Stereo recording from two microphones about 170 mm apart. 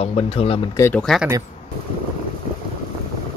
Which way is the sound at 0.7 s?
15° left (ahead or behind).